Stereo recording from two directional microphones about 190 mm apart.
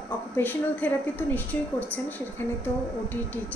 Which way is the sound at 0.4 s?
10° left (ahead or behind).